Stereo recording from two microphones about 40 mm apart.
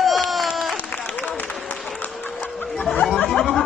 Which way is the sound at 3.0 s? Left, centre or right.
Left.